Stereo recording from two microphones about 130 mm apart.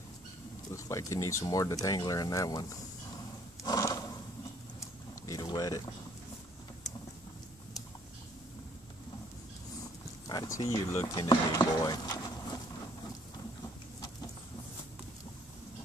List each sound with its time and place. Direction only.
0.7 s speech: 20° left (ahead or behind)
3.6 s roar: 30° left (ahead or behind)
4.7 s vehicle: 25° left (ahead or behind)
10.2 s speech: 30° left (ahead or behind)